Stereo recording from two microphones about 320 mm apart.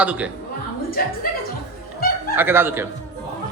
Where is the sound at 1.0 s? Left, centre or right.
Left.